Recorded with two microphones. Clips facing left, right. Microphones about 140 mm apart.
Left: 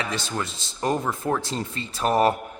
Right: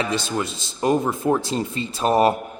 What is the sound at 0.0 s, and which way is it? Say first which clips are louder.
Speech: right 5 dB; 15° right (ahead or behind).